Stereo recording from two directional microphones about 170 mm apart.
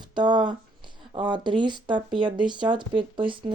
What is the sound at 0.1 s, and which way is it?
Speech, 25° right (ahead or behind).